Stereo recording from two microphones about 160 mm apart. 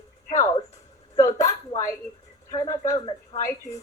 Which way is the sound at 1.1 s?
20° left (ahead or behind).